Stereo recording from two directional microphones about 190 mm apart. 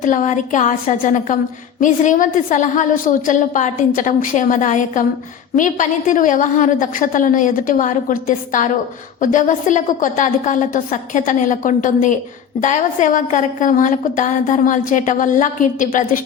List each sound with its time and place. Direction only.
0.0 s a woman's voice: 40° left (ahead or behind)